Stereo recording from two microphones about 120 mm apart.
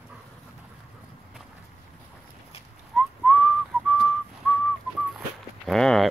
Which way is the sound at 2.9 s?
5° left (ahead or behind).